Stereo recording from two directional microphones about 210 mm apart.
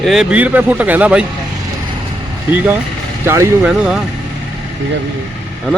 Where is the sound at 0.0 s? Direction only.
Centre (ahead or behind).